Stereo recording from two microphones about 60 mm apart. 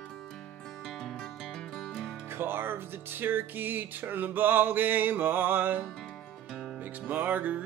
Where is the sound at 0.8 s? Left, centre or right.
Centre.